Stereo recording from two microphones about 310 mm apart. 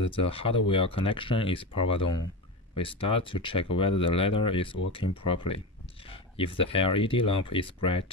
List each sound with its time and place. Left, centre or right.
0.0 s speech: centre